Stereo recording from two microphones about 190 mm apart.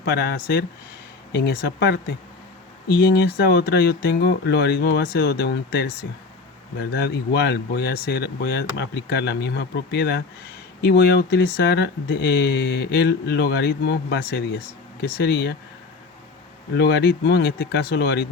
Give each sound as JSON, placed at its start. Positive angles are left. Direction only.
{"t": 0.0, "sound": "speech", "side_deg": 60}
{"t": 6.9, "sound": "speech", "side_deg": 60}
{"t": 16.7, "sound": "speech", "side_deg": 60}